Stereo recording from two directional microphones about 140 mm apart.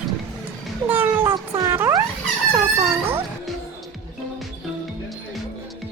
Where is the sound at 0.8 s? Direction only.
15° right (ahead or behind).